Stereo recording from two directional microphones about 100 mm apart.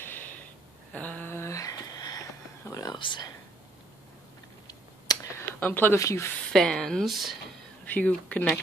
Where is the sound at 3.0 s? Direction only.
50° left (ahead or behind).